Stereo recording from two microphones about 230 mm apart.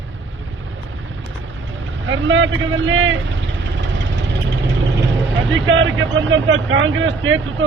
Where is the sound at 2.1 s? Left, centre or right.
Right.